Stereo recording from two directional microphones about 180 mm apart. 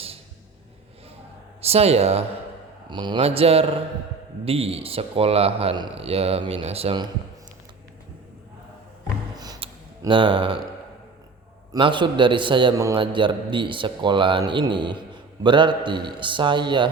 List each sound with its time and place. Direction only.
1.6 s speech: 35° right (ahead or behind)
9.3 s a sound: 20° right (ahead or behind)
11.7 s a man's voice: 25° right (ahead or behind)